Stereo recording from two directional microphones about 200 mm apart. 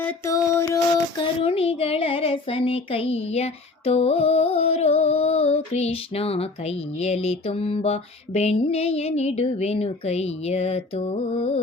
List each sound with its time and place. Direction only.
0.0 s music: 15° left (ahead or behind)
1.4 s child singing: 30° left (ahead or behind)